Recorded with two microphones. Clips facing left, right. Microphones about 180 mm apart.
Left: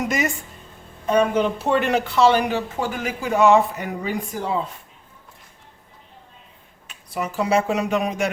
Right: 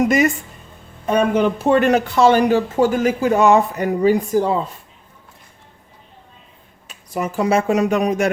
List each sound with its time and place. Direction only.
0.0 s speech: 55° right (ahead or behind); by 4.5 s 40° right (ahead or behind)
6.8 s speech: 45° right (ahead or behind)